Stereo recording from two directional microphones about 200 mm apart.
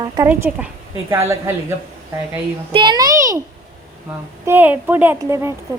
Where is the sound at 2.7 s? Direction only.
20° right (ahead or behind).